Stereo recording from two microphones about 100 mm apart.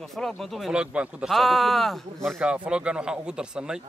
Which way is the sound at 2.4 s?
10° right (ahead or behind).